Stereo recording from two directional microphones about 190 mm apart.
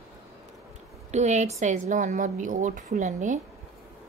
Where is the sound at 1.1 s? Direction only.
35° right (ahead or behind).